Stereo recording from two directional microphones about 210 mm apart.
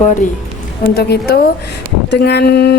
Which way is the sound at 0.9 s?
50° left (ahead or behind).